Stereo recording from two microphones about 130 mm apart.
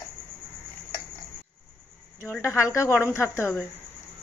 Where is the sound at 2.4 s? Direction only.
20° left (ahead or behind).